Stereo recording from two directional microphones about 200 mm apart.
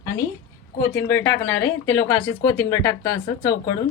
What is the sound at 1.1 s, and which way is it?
Speech, 10° left (ahead or behind).